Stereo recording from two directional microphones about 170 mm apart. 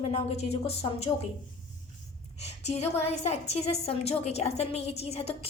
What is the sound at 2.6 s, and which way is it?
A woman's voice, 40° left (ahead or behind).